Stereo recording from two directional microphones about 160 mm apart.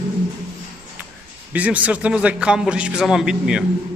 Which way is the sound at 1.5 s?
10° right (ahead or behind).